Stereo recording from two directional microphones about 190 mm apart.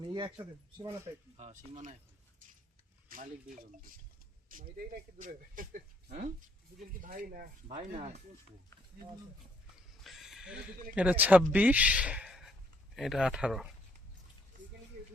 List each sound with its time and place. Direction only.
0.0 s speech: 25° right (ahead or behind)
1.4 s speech: 40° right (ahead or behind)
3.1 s speech: 45° right (ahead or behind)
4.4 s speech: 45° right (ahead or behind)
10.0 s a sound: centre (ahead or behind)
10.9 s a man's voice: 10° right (ahead or behind)